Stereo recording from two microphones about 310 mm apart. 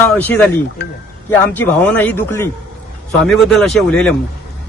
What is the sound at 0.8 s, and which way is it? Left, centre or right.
Speech, left.